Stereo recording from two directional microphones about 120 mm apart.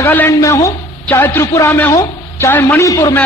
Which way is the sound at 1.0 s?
15° left (ahead or behind).